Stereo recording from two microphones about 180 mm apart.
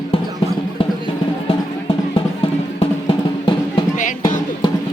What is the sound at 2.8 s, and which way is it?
Drum, 25° left (ahead or behind).